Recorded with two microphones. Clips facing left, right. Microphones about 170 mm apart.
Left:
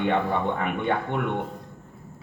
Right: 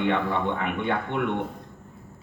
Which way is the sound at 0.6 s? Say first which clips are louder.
Left 1 dB; 45° left (ahead or behind).